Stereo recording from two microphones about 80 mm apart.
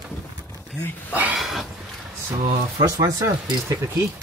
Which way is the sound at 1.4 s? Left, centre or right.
Centre.